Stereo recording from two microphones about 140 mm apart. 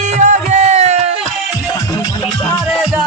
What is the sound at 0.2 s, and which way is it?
Music, 60° right (ahead or behind).